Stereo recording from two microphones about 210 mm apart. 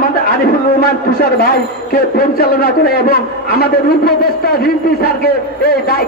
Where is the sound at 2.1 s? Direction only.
45° left (ahead or behind).